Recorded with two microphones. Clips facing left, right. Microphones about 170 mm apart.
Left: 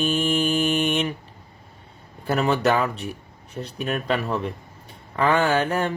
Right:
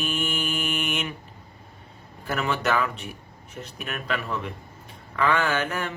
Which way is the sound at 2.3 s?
35° left (ahead or behind).